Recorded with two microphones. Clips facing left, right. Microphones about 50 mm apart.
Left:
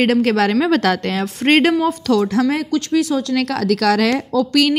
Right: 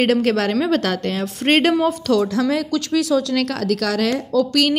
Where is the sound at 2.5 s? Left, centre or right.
Left.